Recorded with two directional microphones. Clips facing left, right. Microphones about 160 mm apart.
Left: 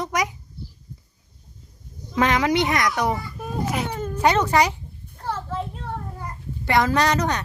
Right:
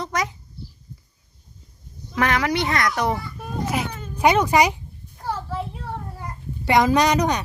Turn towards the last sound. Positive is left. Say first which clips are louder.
# right 2 dB
turn(degrees=-15)  # may be behind; listen again after turning